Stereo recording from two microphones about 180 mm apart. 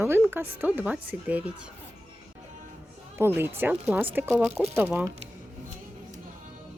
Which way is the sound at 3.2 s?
10° right (ahead or behind).